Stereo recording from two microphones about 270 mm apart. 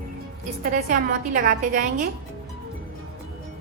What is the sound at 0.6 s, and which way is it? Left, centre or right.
A woman's voice, right.